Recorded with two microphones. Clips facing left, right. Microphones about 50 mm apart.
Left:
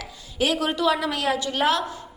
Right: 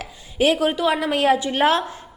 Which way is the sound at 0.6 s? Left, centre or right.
Centre.